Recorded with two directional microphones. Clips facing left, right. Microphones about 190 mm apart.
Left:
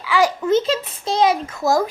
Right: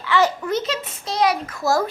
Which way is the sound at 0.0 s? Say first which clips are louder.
Left 1 dB; 10° left (ahead or behind).